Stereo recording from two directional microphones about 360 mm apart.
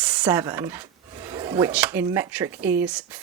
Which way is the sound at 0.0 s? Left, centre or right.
Centre.